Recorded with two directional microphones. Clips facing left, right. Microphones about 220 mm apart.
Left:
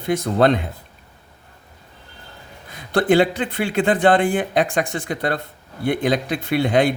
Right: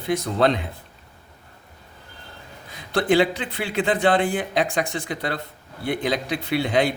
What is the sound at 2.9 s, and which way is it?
Speech, 50° left (ahead or behind).